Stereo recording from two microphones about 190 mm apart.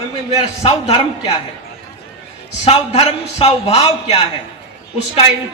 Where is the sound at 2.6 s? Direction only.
30° left (ahead or behind).